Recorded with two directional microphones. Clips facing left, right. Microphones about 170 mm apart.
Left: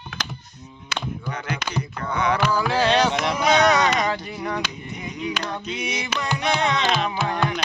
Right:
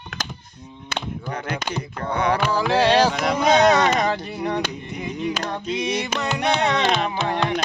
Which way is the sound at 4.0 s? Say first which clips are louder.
Right 2 dB; 30° right (ahead or behind).